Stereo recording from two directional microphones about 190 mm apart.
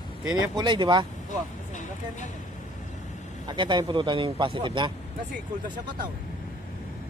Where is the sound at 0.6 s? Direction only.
25° right (ahead or behind).